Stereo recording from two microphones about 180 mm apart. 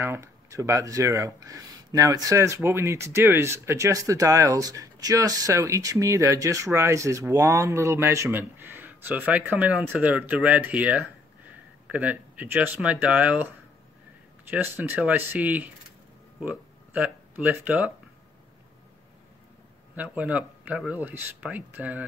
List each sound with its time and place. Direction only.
0.0 s speech: 15° right (ahead or behind)
14.5 s speech: 10° right (ahead or behind)
20.0 s speech: 5° right (ahead or behind)